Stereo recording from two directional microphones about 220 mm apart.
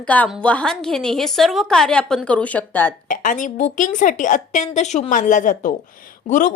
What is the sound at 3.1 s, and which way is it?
A woman's voice, 35° left (ahead or behind).